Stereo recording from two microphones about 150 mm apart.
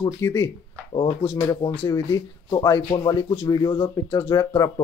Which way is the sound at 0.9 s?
35° left (ahead or behind).